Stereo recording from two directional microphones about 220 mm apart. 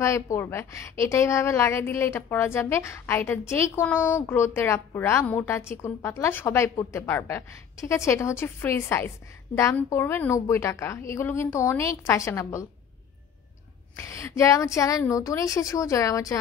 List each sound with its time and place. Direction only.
0.0 s a woman's voice: 15° left (ahead or behind)
13.9 s a woman's voice: 15° left (ahead or behind)